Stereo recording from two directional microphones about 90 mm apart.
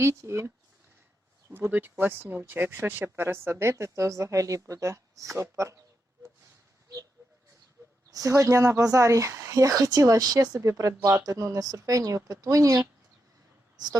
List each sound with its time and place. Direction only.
0.0 s speech: 30° right (ahead or behind)
6.8 s a sound: 35° right (ahead or behind)
8.3 s speech: 35° right (ahead or behind)
10.6 s speech: 35° right (ahead or behind)
13.7 s speech: 50° right (ahead or behind)